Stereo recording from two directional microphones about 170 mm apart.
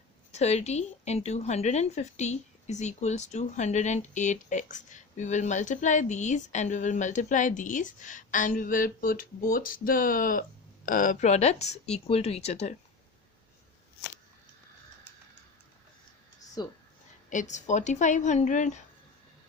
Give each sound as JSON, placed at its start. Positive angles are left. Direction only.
{"t": 0.3, "sound": "a woman's voice", "side_deg": 40}
{"t": 16.6, "sound": "speech", "side_deg": 25}
{"t": 17.2, "sound": "a woman's voice", "side_deg": 45}